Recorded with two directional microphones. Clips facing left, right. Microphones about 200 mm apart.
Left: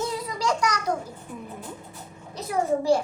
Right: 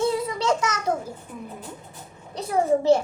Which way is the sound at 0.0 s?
25° right (ahead or behind).